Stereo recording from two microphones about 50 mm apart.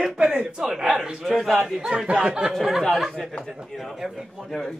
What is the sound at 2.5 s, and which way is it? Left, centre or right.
A woman's voice, centre.